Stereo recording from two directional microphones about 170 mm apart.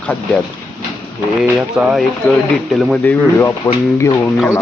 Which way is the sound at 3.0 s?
15° left (ahead or behind).